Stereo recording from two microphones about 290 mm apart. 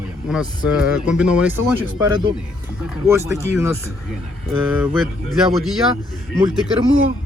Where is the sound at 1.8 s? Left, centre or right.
Centre.